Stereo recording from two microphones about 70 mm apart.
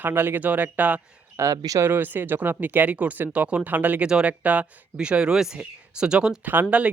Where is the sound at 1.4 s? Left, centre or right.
Right.